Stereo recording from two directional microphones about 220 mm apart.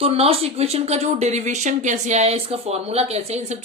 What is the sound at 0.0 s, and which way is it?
Speech, 25° right (ahead or behind).